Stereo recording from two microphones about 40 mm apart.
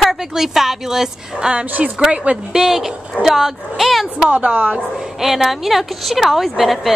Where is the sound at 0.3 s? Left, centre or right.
Centre.